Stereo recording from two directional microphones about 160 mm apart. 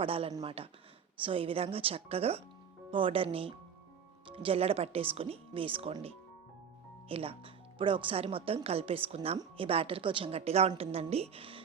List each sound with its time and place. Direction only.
0.0 s speech: 35° right (ahead or behind)